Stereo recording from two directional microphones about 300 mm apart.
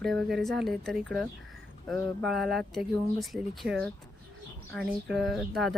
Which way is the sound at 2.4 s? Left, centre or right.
Centre.